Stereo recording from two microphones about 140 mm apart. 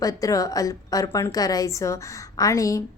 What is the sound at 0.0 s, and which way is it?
A woman's voice, 25° left (ahead or behind).